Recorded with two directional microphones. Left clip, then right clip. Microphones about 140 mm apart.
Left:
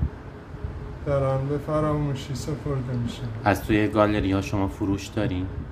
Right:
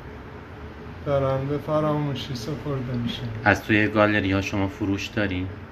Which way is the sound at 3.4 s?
20° left (ahead or behind).